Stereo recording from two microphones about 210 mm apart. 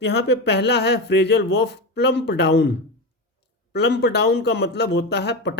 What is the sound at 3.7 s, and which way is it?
Speech, 50° left (ahead or behind).